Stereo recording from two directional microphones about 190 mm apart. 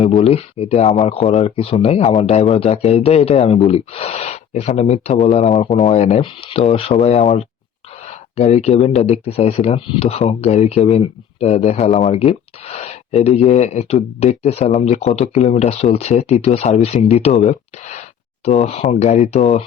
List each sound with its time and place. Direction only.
0.2 s speech: 35° left (ahead or behind)